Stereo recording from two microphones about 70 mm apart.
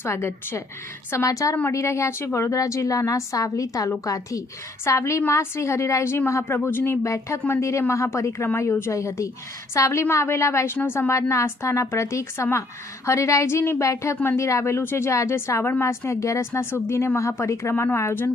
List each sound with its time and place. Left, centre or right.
0.0 s a woman's voice: left
7.0 s a woman's voice: left
10.8 s a woman's voice: left